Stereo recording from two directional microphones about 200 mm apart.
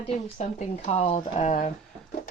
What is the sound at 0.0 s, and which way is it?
Speech, 35° left (ahead or behind).